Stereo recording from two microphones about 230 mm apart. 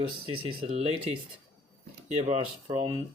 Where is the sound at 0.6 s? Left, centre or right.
Right.